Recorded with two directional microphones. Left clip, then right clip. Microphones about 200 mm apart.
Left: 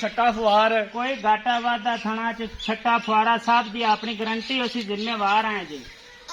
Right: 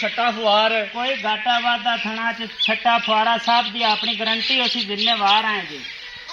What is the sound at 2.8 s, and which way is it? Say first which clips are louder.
Speech: right 1 dB; 25° right (ahead or behind).